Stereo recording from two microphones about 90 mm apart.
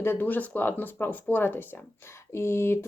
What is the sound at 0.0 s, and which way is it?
Speech, 25° left (ahead or behind).